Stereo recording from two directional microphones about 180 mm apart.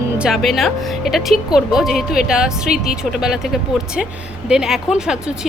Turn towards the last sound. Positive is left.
turn(degrees=-5)  # may be behind; listen again after turning